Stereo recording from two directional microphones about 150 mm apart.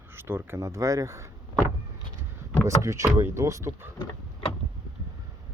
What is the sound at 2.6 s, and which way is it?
Speech, 20° right (ahead or behind).